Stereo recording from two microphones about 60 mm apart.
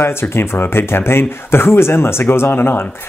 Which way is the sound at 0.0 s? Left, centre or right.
Left.